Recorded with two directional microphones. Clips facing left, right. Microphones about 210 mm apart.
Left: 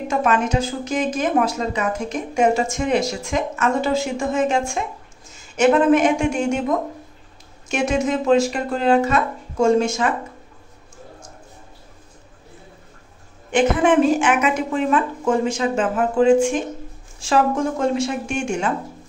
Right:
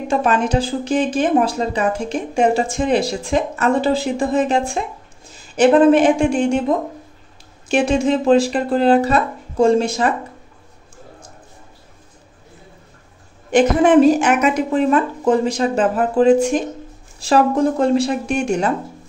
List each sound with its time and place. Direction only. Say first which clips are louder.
0.1 s a woman's voice: right 3 dB; 30° right (ahead or behind)
7.6 s speech: right 4 dB; 30° right (ahead or behind)
13.5 s speech: right 4 dB; 40° right (ahead or behind)